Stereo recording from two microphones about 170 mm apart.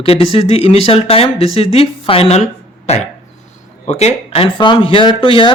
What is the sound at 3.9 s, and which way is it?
Speech, 35° left (ahead or behind).